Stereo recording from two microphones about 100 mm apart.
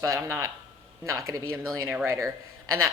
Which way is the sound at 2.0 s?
35° right (ahead or behind).